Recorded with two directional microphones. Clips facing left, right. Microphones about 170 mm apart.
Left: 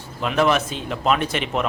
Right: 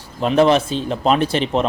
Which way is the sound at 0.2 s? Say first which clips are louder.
Right 5 dB; 30° right (ahead or behind).